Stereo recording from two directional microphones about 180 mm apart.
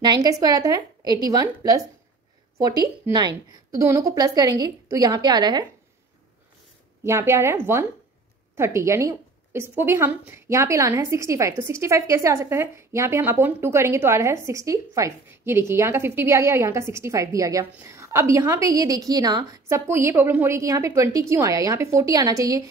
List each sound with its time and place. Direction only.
0.0 s a woman's voice: 20° right (ahead or behind)
7.1 s a woman's voice: 15° right (ahead or behind)